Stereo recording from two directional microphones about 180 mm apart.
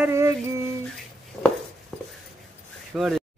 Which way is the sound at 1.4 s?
Centre (ahead or behind).